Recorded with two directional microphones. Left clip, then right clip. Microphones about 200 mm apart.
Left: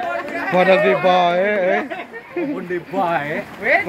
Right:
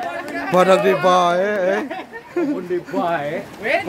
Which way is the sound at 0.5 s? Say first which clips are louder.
Even; 25° right (ahead or behind).